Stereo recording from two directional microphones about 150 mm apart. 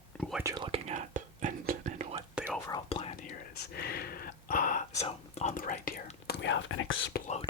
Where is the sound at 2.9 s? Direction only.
40° left (ahead or behind).